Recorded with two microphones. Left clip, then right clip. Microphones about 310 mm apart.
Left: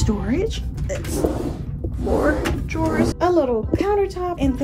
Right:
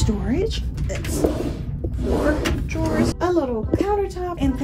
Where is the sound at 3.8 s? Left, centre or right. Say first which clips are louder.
Left 2 dB; centre.